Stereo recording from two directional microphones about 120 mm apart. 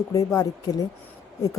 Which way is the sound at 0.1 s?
30° left (ahead or behind).